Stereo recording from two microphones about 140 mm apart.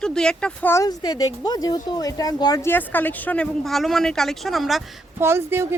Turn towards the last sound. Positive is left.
turn(degrees=-20)  # may be behind; listen again after turning